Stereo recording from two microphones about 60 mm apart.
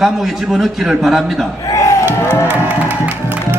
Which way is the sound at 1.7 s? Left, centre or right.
Left.